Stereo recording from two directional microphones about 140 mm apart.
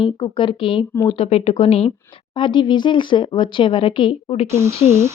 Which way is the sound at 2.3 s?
35° left (ahead or behind).